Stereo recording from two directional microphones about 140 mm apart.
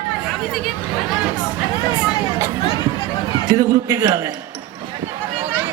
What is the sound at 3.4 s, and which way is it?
Speech, 30° right (ahead or behind).